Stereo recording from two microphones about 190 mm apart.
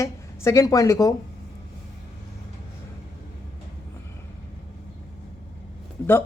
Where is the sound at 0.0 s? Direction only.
15° left (ahead or behind).